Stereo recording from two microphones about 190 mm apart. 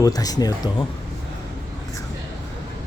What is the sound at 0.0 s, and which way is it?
Speech, 20° left (ahead or behind).